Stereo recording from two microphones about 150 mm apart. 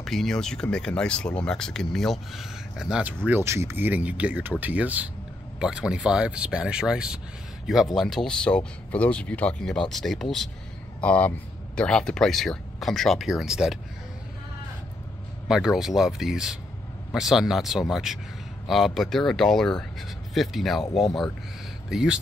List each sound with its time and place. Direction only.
0.0 s speech: centre (ahead or behind)
15.4 s speech: 5° right (ahead or behind)